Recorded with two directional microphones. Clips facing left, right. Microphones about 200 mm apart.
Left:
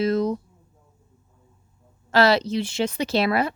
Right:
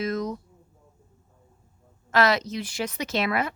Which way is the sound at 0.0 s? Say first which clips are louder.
Left 6 dB; 30° left (ahead or behind).